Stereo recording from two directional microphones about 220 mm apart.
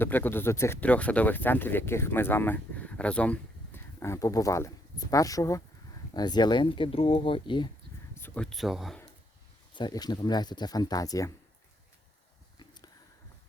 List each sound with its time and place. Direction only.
0.0 s speech: 10° left (ahead or behind)
8.2 s speech: 5° left (ahead or behind)
9.7 s speech: 20° left (ahead or behind)
12.5 s a sound: 20° left (ahead or behind)